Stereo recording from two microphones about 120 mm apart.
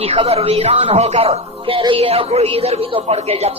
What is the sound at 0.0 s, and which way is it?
A man's voice, 55° right (ahead or behind).